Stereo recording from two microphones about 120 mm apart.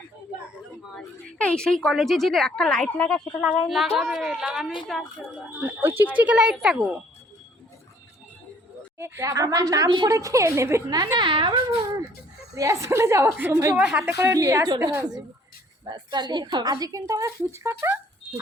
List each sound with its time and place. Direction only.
0.9 s a woman's voice: 10° left (ahead or behind)
5.8 s a woman's voice: 20° right (ahead or behind)
9.0 s a woman's voice: 20° right (ahead or behind); by 11.6 s 45° right (ahead or behind)
12.5 s a woman's voice: 25° right (ahead or behind)
13.7 s a woman's voice: 10° right (ahead or behind)